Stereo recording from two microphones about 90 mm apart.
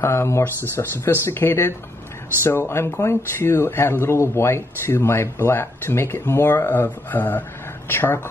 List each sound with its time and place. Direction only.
0.0 s speech: 30° left (ahead or behind)